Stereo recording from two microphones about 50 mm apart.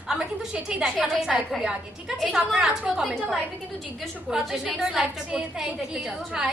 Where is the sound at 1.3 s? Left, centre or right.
Centre.